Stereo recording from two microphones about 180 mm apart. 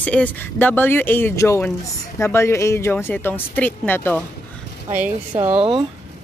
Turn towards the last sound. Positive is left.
turn(degrees=-25)  # may be behind; listen again after turning